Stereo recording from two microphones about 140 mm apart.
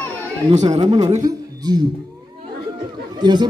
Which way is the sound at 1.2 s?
30° right (ahead or behind).